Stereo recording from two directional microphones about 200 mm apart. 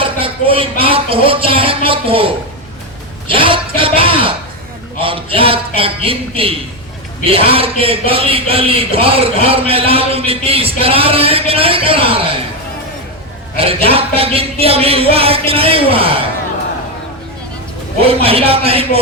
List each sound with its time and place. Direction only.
0.0 s speech: 25° right (ahead or behind)
13.6 s speech: 30° right (ahead or behind)
18.0 s speech: 30° right (ahead or behind)